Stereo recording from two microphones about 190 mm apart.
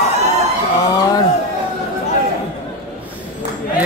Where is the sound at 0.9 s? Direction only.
20° left (ahead or behind).